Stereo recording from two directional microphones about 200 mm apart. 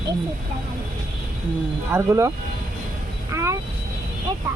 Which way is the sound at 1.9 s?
15° right (ahead or behind).